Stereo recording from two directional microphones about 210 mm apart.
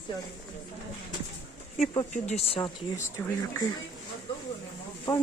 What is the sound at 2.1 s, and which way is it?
Speech, 30° left (ahead or behind).